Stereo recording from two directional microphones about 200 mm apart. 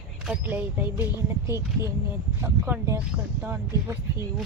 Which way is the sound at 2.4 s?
15° right (ahead or behind).